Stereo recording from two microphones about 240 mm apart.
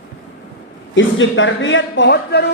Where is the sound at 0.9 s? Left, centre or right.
Left.